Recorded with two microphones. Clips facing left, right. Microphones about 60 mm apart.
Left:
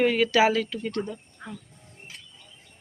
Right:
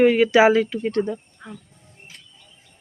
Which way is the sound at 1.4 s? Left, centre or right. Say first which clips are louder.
Right 1 dB; centre.